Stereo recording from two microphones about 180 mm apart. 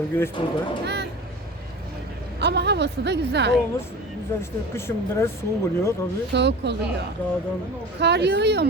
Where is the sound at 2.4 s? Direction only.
70° right (ahead or behind).